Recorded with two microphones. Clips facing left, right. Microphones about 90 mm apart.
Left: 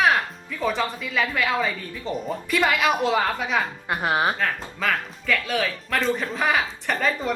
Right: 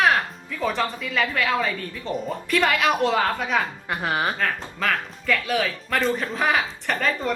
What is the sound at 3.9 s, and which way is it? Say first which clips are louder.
Speech: left 2 dB; 15° left (ahead or behind).